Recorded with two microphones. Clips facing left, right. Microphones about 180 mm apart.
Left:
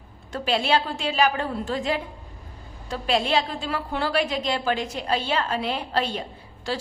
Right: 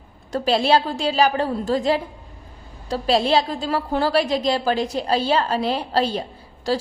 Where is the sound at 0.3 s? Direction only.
40° right (ahead or behind).